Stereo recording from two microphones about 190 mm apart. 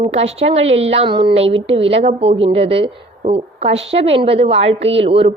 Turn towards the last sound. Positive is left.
turn(degrees=-30)  # may be behind; listen again after turning